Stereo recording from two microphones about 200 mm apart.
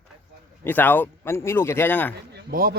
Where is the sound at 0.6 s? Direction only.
10° left (ahead or behind).